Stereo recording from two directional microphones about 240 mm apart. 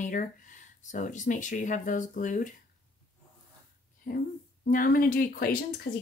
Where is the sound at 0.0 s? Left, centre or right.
Left.